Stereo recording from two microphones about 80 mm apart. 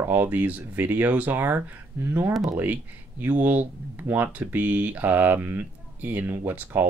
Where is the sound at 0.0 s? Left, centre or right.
Right.